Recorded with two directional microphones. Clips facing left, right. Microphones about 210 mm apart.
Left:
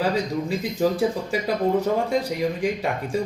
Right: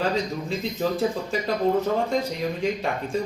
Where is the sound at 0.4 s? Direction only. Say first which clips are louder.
Left 3 dB; 10° left (ahead or behind).